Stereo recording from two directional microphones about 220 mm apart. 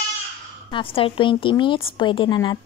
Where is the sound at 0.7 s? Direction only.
25° left (ahead or behind).